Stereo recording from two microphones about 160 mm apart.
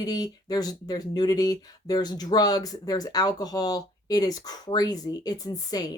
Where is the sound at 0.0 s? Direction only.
25° left (ahead or behind).